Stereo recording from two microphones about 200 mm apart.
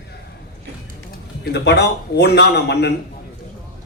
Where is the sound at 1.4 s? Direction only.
55° left (ahead or behind).